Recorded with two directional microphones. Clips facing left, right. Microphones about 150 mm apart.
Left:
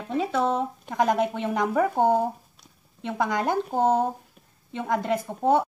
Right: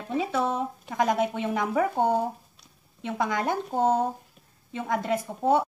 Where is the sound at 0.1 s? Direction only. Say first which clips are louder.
Left 2 dB; 5° right (ahead or behind).